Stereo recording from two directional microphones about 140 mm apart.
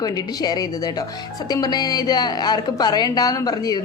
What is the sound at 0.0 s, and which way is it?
A woman's voice, 30° left (ahead or behind).